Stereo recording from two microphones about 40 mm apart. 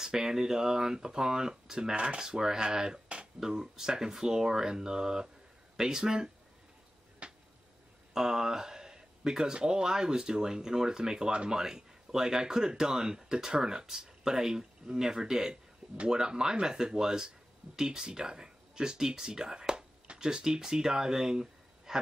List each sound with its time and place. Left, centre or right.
0.0 s speech: centre
7.2 s a sound: right
8.1 s speech: centre